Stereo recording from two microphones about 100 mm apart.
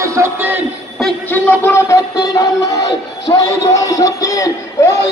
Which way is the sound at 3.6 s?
35° left (ahead or behind).